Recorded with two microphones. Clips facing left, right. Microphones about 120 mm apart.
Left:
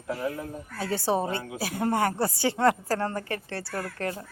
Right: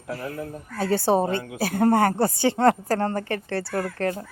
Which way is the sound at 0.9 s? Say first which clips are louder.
Right 6 dB; 30° right (ahead or behind).